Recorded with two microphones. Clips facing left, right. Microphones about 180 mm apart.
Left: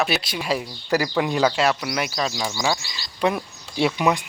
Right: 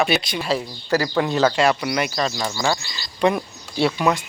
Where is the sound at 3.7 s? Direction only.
15° left (ahead or behind).